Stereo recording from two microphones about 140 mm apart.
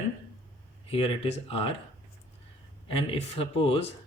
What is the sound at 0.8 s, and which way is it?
Speech, 40° left (ahead or behind).